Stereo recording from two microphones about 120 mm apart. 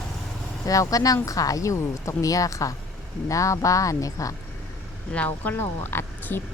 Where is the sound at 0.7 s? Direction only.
30° left (ahead or behind).